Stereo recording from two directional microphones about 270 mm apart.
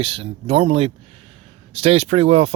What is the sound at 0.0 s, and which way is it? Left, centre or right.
Speech, right.